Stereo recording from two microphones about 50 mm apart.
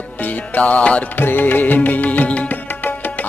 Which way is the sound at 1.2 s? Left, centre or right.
Left.